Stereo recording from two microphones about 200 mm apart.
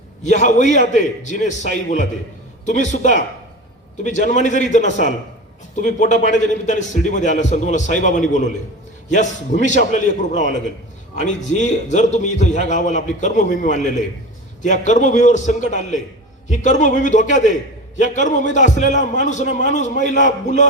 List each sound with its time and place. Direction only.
0.2 s a man's voice: 40° left (ahead or behind)